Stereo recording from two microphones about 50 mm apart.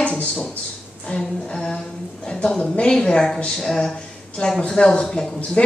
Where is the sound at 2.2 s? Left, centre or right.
Centre.